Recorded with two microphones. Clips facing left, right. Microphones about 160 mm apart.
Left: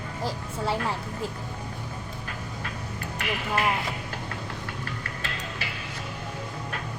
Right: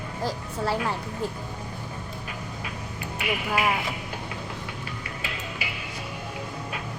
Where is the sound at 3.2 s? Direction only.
10° right (ahead or behind).